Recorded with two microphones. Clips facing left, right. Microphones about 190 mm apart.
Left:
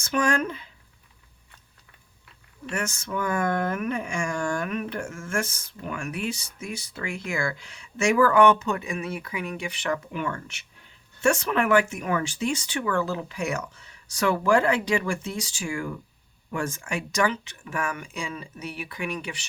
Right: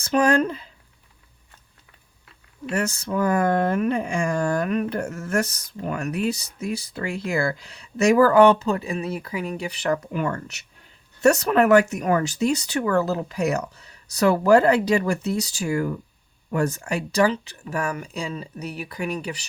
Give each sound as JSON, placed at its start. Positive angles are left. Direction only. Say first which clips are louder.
{"t": 0.0, "sound": "speech", "louder": "right 5 dB", "side_deg": -35}
{"t": 2.6, "sound": "speech", "louder": "right 5 dB", "side_deg": -35}